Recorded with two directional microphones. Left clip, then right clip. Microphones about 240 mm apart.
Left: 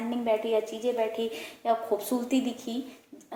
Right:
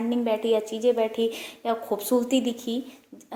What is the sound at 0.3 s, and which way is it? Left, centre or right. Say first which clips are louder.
A woman's voice: right 1 dB; right.